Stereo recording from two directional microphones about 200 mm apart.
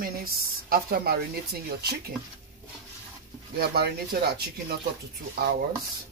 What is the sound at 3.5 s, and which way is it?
Speech, 50° right (ahead or behind).